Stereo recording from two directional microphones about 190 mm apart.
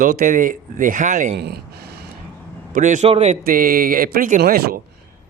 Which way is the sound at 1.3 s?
60° right (ahead or behind).